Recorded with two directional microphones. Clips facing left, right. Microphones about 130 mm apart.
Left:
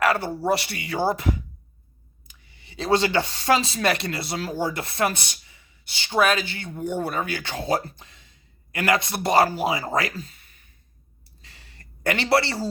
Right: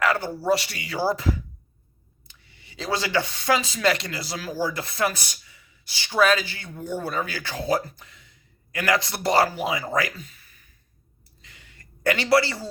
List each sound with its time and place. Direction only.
0.0 s speech: 25° left (ahead or behind)
2.2 s speech: 20° left (ahead or behind)
11.4 s a sound: 30° left (ahead or behind)